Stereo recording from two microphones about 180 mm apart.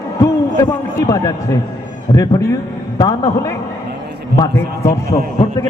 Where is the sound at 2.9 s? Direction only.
20° left (ahead or behind).